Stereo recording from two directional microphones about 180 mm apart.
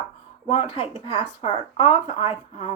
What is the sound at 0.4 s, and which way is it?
Speech, 30° left (ahead or behind).